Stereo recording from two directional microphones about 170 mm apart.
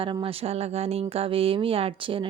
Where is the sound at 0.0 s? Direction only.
30° right (ahead or behind).